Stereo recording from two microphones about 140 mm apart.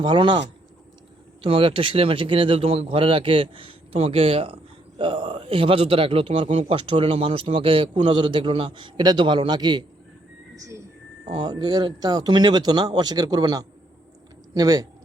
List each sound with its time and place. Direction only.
0.0 s speech: 35° right (ahead or behind)
10.5 s a sound: 20° right (ahead or behind)
11.3 s speech: 35° right (ahead or behind)